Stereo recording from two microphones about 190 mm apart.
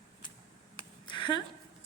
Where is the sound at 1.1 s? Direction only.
25° left (ahead or behind).